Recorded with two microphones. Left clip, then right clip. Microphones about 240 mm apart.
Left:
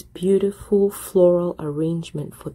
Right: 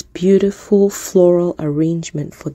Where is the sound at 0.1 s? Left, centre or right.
Right.